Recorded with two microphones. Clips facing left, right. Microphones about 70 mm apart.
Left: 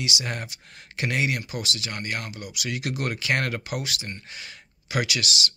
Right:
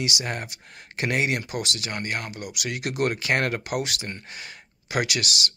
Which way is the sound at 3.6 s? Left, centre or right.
Right.